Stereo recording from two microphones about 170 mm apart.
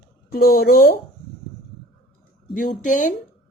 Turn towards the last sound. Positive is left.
turn(degrees=50)  # may be behind; listen again after turning